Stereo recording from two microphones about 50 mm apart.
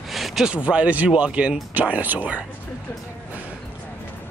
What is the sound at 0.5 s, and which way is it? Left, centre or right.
Speech, right.